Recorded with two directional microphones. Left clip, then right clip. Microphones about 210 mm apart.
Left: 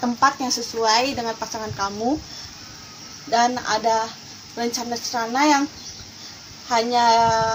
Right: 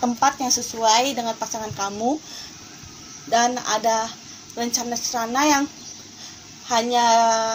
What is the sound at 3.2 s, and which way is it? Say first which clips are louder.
A woman's voice: even; 35° right (ahead or behind).